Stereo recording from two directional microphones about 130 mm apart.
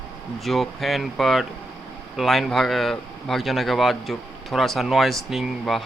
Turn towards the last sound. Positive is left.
turn(degrees=0)  # may be behind; listen again after turning